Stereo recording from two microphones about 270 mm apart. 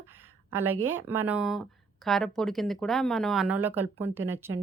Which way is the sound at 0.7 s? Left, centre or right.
Right.